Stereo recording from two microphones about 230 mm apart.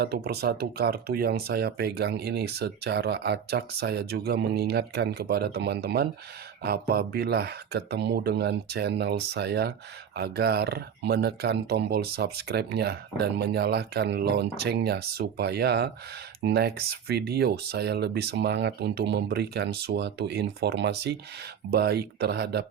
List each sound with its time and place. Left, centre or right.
0.0 s speech: right